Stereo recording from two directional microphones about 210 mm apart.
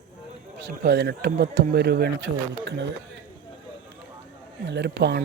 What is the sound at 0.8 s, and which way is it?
Speech, 50° right (ahead or behind).